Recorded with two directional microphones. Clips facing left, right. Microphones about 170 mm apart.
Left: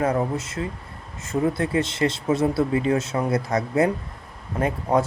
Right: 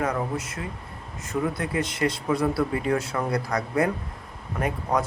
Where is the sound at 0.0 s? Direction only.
30° left (ahead or behind).